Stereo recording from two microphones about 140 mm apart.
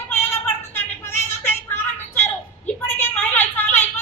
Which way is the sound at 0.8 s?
15° left (ahead or behind).